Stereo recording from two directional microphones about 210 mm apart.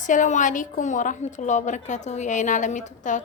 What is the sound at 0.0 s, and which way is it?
A woman's voice, 35° left (ahead or behind).